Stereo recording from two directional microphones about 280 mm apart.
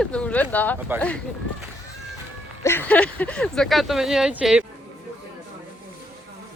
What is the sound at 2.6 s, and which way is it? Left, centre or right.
Speech, centre.